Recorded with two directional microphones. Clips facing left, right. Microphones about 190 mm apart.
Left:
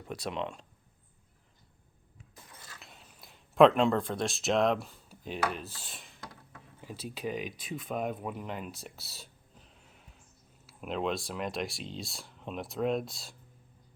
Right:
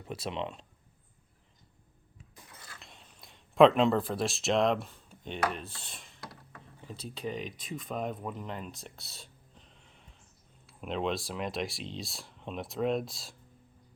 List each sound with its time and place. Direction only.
0.0 s speech: centre (ahead or behind)
2.7 s speech: centre (ahead or behind)